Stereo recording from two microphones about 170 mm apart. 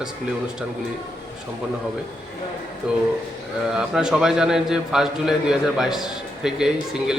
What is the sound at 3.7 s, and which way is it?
A man's voice, 5° right (ahead or behind).